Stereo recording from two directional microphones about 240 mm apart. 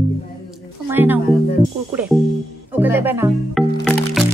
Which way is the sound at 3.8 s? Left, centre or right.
Centre.